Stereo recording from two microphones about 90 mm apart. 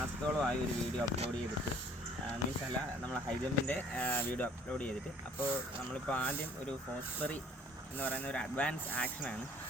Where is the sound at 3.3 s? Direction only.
15° left (ahead or behind).